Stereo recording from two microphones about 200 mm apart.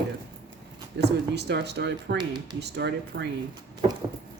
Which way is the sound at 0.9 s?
60° right (ahead or behind).